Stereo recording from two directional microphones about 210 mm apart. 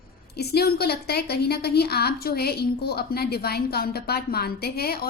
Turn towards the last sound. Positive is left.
turn(degrees=50)  # may be behind; listen again after turning